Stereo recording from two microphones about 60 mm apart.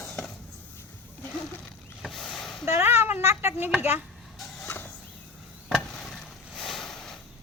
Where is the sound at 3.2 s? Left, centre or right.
Right.